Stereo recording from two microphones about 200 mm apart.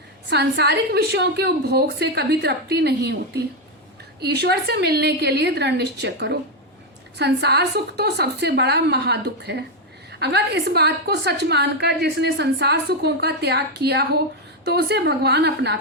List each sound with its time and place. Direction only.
0.3 s a woman's voice: 55° right (ahead or behind)